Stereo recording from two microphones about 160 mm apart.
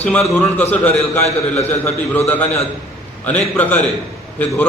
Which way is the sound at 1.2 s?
40° left (ahead or behind).